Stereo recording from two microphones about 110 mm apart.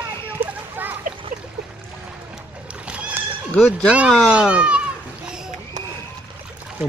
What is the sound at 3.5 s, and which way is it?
Speech, 5° left (ahead or behind).